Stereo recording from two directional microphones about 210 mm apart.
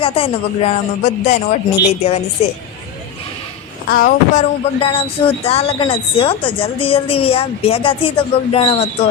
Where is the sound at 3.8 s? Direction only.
40° left (ahead or behind).